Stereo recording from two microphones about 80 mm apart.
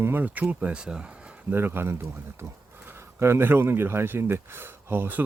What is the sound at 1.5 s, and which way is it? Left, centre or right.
Speech, right.